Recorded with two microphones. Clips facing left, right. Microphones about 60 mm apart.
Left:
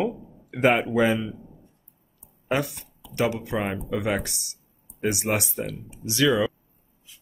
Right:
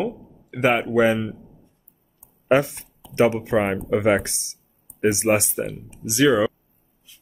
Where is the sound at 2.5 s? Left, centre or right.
Right.